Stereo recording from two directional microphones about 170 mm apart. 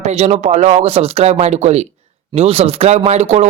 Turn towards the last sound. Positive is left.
turn(degrees=-40)  # may be behind; listen again after turning